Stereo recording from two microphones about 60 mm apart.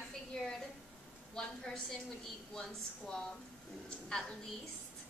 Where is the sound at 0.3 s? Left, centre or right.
Centre.